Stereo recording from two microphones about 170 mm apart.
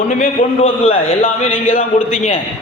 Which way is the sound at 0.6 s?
35° left (ahead or behind).